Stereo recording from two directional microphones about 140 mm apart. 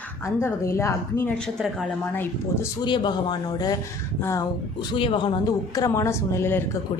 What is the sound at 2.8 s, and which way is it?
Speech, 35° left (ahead or behind).